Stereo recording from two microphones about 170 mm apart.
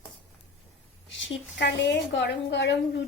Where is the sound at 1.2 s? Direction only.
90° left.